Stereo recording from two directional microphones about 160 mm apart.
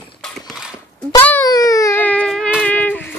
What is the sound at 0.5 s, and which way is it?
Horse, 5° right (ahead or behind).